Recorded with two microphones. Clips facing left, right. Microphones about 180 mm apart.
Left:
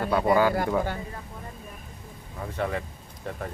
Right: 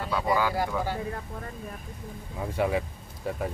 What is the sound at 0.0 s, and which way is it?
Speech, 55° left (ahead or behind).